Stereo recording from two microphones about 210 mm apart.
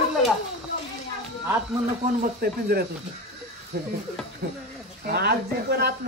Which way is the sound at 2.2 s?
45° right (ahead or behind).